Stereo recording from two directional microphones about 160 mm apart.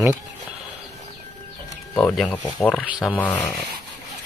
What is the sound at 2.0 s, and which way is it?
Speech, 10° left (ahead or behind).